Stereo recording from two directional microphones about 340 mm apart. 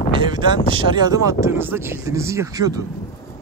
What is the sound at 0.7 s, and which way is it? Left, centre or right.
Speech, centre.